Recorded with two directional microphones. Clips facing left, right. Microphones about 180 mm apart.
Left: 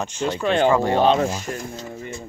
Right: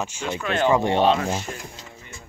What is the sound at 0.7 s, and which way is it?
Speech, 20° right (ahead or behind).